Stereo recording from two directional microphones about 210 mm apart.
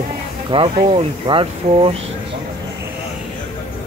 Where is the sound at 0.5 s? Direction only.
25° right (ahead or behind).